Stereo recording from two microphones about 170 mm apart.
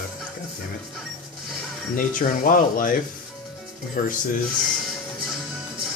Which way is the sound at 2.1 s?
55° left (ahead or behind).